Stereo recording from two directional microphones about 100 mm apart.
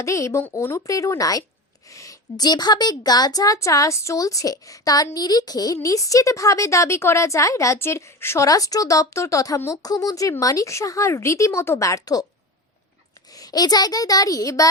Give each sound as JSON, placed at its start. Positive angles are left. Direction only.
{"t": 0.0, "sound": "speech", "side_deg": 30}
{"t": 13.3, "sound": "speech", "side_deg": 40}